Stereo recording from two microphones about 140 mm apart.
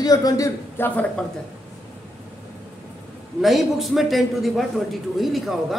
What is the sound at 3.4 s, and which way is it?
A man's voice, centre (ahead or behind).